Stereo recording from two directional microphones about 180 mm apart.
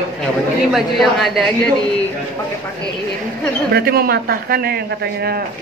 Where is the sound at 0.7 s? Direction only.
Centre (ahead or behind).